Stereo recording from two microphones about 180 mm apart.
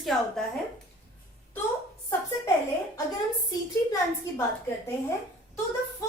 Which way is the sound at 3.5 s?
15° left (ahead or behind).